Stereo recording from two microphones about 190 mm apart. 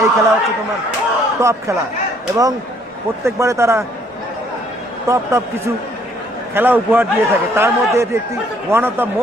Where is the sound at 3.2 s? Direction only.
15° right (ahead or behind).